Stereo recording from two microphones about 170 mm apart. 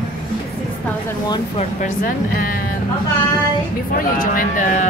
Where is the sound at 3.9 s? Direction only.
55° left (ahead or behind).